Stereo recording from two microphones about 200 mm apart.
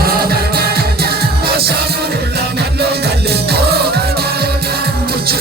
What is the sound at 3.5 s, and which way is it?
Music, 55° right (ahead or behind).